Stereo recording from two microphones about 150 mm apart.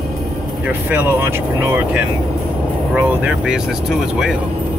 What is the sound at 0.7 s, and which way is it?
Speech, 10° right (ahead or behind).